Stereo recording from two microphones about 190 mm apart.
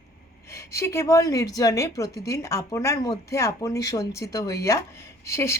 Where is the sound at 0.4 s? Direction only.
15° left (ahead or behind).